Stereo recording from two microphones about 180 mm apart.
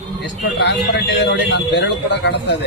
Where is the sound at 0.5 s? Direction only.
70° left (ahead or behind).